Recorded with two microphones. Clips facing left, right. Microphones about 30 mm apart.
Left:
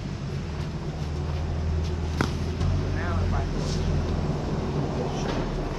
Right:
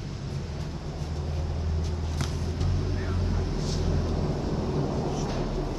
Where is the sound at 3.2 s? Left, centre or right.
Left.